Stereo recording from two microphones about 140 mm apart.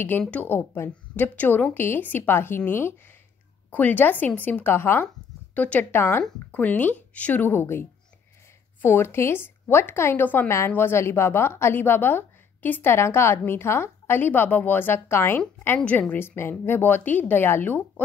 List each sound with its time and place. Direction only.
0.2 s a woman's voice: 10° left (ahead or behind)
8.8 s a woman's voice: 15° left (ahead or behind)